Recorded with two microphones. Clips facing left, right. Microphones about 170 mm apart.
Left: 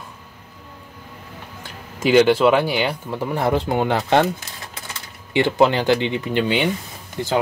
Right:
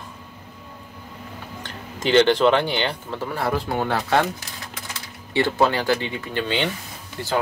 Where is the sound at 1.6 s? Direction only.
10° left (ahead or behind).